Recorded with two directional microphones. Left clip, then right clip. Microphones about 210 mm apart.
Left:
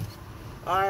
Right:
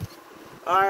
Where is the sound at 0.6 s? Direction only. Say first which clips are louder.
Right 4 dB; 15° right (ahead or behind).